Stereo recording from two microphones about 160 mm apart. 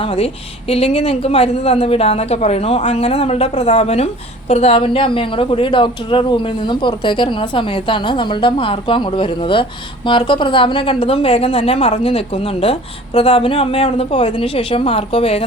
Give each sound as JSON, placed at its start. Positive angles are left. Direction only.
{"t": 0.0, "sound": "a woman's voice", "side_deg": 35}